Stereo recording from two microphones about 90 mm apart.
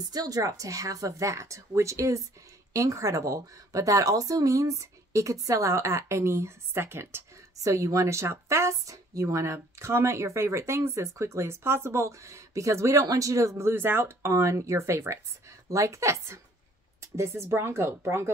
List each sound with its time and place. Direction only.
0.1 s speech: 45° right (ahead or behind); by 7.2 s 25° right (ahead or behind)
7.5 s speech: 40° right (ahead or behind)